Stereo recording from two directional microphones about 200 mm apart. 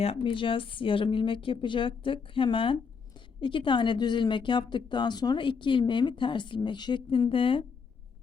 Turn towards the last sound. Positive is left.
turn(degrees=25)  # may be behind; listen again after turning